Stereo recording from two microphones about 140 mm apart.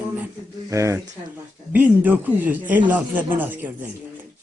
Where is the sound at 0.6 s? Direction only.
20° right (ahead or behind).